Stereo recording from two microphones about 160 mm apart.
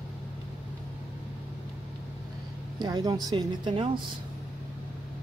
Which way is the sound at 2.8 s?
25° right (ahead or behind).